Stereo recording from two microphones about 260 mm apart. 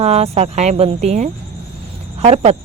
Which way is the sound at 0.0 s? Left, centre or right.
Right.